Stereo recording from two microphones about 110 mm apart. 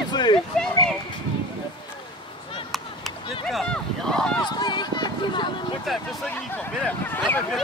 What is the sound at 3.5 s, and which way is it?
Speech, 5° left (ahead or behind).